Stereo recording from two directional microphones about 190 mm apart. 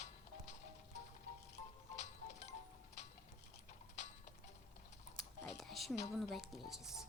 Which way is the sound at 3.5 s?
40° left (ahead or behind).